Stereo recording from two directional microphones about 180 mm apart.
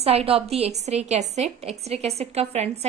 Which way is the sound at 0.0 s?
35° right (ahead or behind).